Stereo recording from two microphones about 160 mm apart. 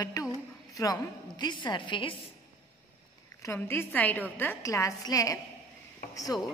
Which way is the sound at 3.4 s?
15° left (ahead or behind).